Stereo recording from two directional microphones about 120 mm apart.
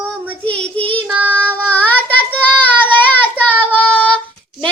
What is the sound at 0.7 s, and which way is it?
Child singing, 50° right (ahead or behind).